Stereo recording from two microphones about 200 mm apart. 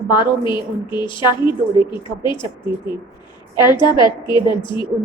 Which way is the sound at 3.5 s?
20° left (ahead or behind).